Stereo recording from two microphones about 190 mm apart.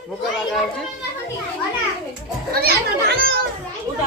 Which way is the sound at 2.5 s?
55° right (ahead or behind).